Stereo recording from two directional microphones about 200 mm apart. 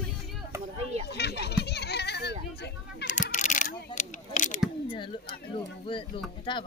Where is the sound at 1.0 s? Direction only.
55° left (ahead or behind).